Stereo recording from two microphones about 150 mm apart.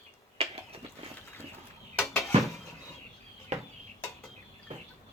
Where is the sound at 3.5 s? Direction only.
45° right (ahead or behind).